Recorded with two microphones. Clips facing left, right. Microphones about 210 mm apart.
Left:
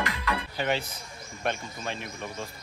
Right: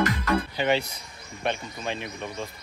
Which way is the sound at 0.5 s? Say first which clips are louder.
Right 2 dB; centre (ahead or behind).